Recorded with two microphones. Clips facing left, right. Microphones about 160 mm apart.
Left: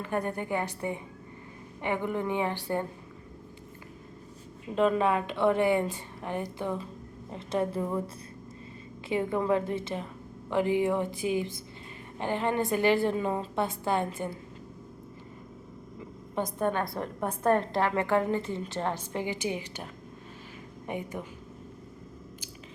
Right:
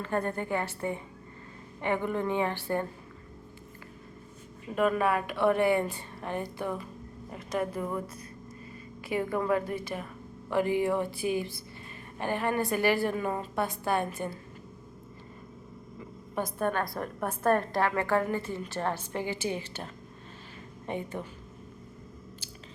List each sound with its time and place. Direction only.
0.0 s a woman's voice: 15° left (ahead or behind)
4.7 s a woman's voice: 25° left (ahead or behind)
16.3 s a woman's voice: 20° left (ahead or behind)